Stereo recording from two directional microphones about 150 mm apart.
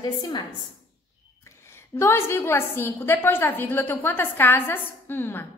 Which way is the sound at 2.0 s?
15° left (ahead or behind).